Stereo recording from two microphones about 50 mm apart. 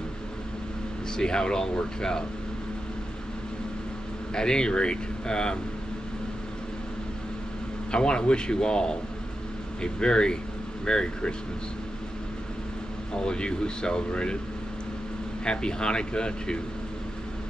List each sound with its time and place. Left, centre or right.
1.1 s speech: centre
4.4 s speech: centre
7.9 s speech: centre
13.1 s speech: centre
15.4 s speech: centre